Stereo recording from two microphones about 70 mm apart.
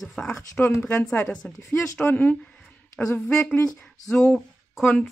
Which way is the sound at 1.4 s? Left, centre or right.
Left.